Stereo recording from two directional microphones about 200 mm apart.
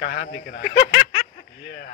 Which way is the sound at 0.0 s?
45° left (ahead or behind).